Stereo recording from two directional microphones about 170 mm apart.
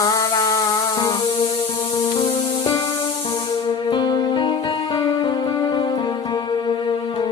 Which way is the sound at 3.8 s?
25° left (ahead or behind).